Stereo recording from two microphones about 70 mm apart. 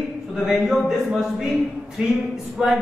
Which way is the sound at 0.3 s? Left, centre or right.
Centre.